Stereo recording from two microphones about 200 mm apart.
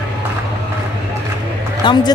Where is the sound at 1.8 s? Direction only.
25° left (ahead or behind).